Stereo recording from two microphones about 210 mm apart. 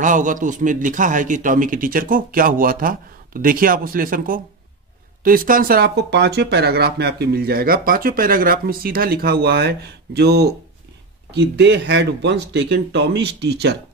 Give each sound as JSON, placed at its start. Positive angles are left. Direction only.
{"t": 0.0, "sound": "a man's voice", "side_deg": -40}